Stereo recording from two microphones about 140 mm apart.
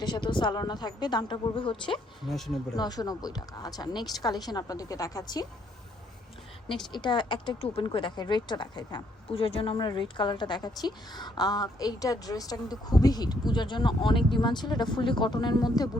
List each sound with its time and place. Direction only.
0.0 s speech: 30° left (ahead or behind)
2.2 s speech: centre (ahead or behind)
2.7 s speech: 30° left (ahead or behind)
6.9 s speech: 35° left (ahead or behind)